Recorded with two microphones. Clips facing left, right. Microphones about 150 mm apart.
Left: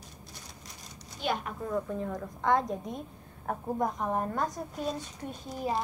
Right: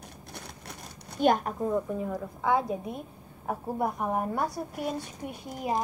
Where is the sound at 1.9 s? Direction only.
10° right (ahead or behind).